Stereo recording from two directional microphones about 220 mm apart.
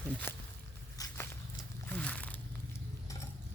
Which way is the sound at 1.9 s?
5° left (ahead or behind).